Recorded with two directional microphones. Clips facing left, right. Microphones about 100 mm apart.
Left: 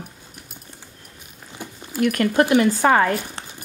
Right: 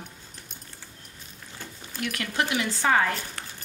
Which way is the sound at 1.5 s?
15° left (ahead or behind).